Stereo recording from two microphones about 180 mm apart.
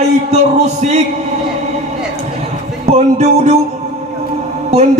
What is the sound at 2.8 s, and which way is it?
Speech, 40° right (ahead or behind).